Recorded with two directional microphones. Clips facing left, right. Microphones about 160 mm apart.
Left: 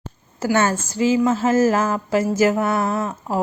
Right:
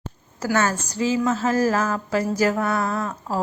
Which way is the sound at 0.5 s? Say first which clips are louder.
Left 3 dB; 25° left (ahead or behind).